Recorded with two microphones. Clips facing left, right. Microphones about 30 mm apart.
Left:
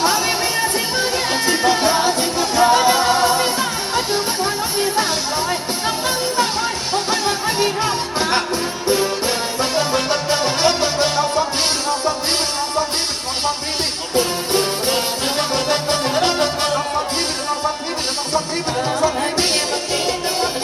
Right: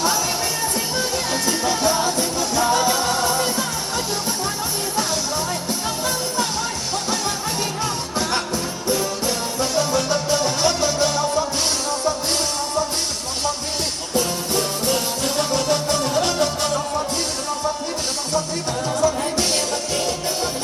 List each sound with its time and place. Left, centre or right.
0.6 s music: left
6.1 s music: left
14.2 s music: left
18.9 s music: left